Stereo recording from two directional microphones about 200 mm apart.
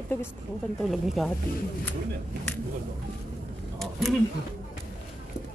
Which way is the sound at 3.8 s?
Centre (ahead or behind).